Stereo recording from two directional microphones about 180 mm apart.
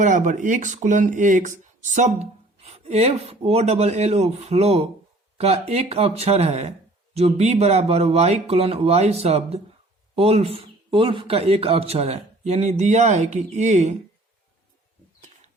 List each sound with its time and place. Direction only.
0.0 s speech: 45° right (ahead or behind)